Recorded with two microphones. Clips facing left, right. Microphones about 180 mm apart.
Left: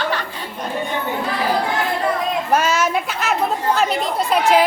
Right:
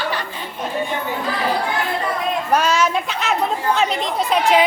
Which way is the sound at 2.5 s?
5° left (ahead or behind).